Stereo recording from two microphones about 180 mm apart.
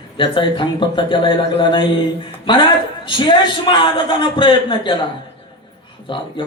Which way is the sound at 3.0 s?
25° left (ahead or behind).